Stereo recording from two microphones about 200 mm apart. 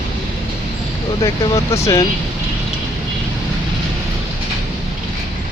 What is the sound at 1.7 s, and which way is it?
Speech, 15° left (ahead or behind).